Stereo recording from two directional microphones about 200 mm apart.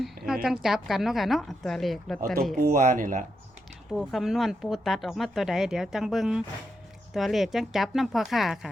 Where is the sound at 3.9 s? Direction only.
Centre (ahead or behind).